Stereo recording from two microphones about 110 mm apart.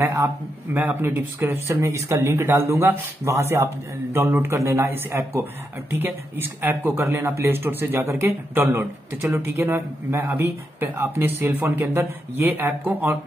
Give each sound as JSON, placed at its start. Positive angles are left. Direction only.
{"t": 0.0, "sound": "speech", "side_deg": -30}
{"t": 0.7, "sound": "speech", "side_deg": -15}